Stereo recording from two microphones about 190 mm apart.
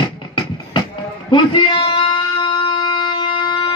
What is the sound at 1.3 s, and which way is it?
Music, 25° left (ahead or behind).